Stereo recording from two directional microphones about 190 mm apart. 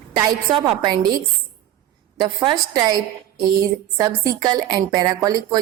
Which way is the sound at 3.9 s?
20° right (ahead or behind).